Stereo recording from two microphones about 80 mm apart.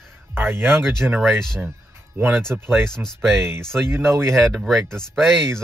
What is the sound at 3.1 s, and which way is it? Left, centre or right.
Speech, right.